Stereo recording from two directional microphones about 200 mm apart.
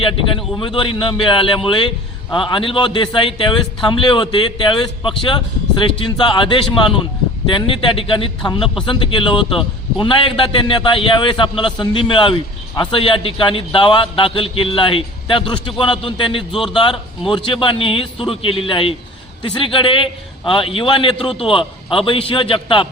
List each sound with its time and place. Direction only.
0.0 s a man's voice: 25° left (ahead or behind)